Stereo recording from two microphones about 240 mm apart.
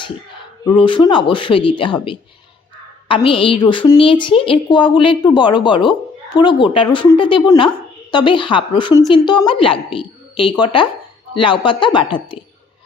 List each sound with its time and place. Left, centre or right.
0.8 s a woman's voice: left